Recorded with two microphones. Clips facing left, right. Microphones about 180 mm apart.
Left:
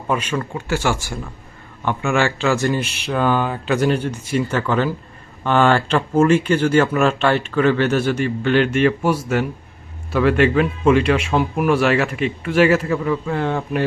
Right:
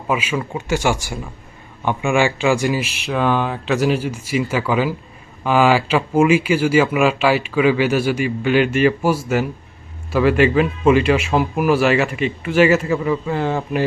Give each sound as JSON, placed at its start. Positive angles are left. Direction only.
{"t": 0.1, "sound": "speech", "side_deg": -5}
{"t": 0.5, "sound": "speech", "side_deg": -15}